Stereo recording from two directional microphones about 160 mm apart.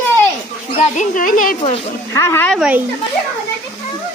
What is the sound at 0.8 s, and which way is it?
Speech, 50° left (ahead or behind).